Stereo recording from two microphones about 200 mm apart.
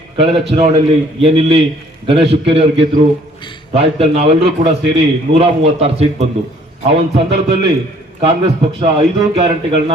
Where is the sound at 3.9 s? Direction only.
30° right (ahead or behind).